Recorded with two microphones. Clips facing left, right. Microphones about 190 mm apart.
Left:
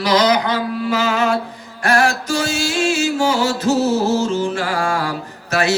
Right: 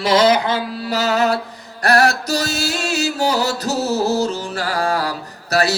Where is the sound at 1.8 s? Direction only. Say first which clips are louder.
Right 1 dB; 40° right (ahead or behind).